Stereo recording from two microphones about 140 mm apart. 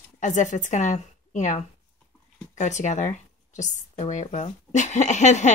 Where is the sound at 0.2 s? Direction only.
60° left (ahead or behind).